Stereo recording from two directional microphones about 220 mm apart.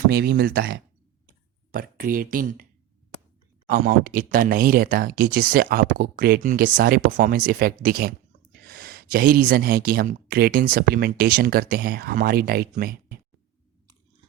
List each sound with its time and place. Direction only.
0.1 s speech: 45° right (ahead or behind)
3.7 s speech: 40° right (ahead or behind)